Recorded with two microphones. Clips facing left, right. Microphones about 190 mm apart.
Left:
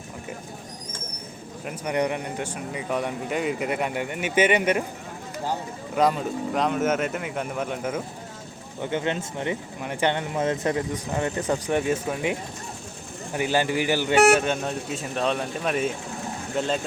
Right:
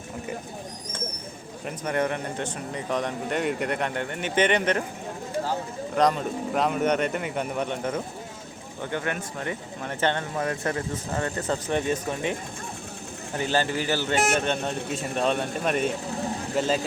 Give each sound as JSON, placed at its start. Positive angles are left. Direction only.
{"t": 1.6, "sound": "speech", "side_deg": 15}
{"t": 5.9, "sound": "speech", "side_deg": 5}
{"t": 8.8, "sound": "speech", "side_deg": 20}